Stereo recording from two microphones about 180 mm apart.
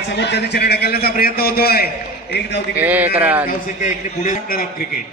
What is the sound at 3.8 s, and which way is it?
Speech, 50° left (ahead or behind).